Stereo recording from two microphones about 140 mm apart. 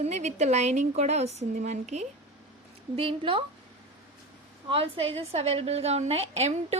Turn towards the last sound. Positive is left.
turn(degrees=-50)  # may be behind; listen again after turning